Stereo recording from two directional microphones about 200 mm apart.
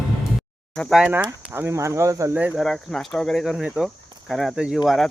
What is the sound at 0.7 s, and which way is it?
Speech, centre (ahead or behind).